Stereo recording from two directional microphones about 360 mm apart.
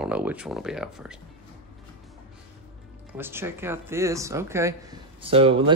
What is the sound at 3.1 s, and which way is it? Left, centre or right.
Speech, centre.